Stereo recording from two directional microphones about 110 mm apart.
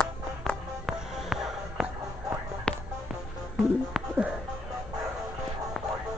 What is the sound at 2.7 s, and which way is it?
Music, 10° left (ahead or behind).